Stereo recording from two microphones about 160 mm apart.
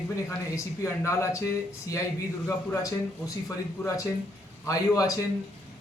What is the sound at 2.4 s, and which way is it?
Speech, 20° left (ahead or behind).